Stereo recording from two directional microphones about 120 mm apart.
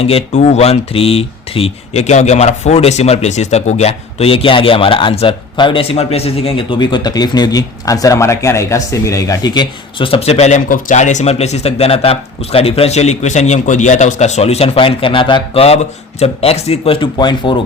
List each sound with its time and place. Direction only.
0.0 s speech: 55° left (ahead or behind)
15.6 s speech: 60° left (ahead or behind); by 17.6 s 40° left (ahead or behind)